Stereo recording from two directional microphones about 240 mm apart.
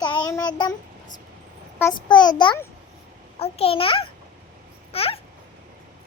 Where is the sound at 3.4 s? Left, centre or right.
Left.